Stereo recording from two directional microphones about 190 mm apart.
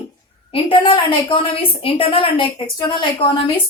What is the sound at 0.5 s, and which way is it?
A woman's voice, 25° left (ahead or behind).